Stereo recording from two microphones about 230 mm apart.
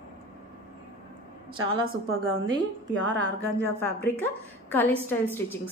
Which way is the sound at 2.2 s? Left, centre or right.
Right.